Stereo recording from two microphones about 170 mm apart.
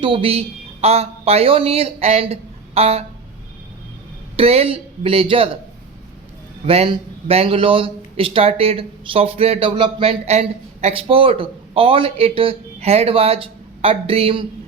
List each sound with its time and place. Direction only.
0.0 s a woman's voice: 30° right (ahead or behind)
4.4 s speech: 35° right (ahead or behind)
6.7 s speech: 35° right (ahead or behind)